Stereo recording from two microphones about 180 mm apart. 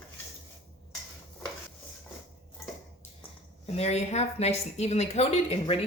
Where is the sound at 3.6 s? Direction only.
35° left (ahead or behind).